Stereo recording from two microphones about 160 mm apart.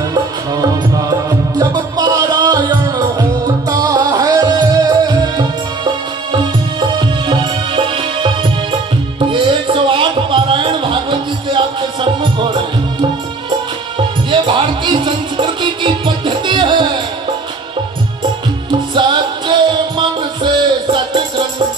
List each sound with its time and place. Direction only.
0.1 s music: 25° right (ahead or behind)
13.9 s music: 30° right (ahead or behind)
18.7 s music: 30° right (ahead or behind)